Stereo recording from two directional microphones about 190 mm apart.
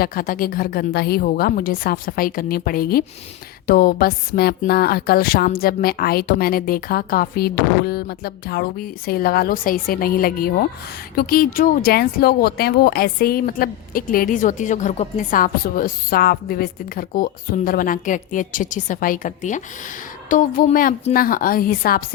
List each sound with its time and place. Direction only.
0.0 s speech: 50° left (ahead or behind)